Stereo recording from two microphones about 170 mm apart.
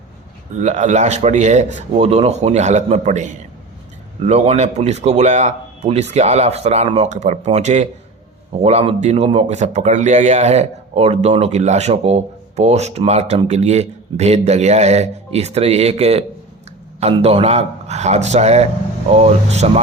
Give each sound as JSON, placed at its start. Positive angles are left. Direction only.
{"t": 0.6, "sound": "speech", "side_deg": -45}